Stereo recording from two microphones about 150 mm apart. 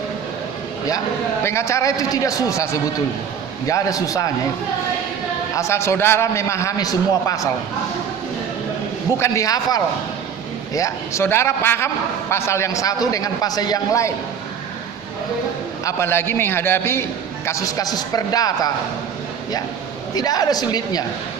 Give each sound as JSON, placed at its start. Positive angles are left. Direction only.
{"t": 1.5, "sound": "a man's voice", "side_deg": 20}
{"t": 3.7, "sound": "a man's voice", "side_deg": 20}
{"t": 5.5, "sound": "a man's voice", "side_deg": 20}
{"t": 9.1, "sound": "a man's voice", "side_deg": 20}
{"t": 15.8, "sound": "a man's voice", "side_deg": 20}
{"t": 20.1, "sound": "a man's voice", "side_deg": 25}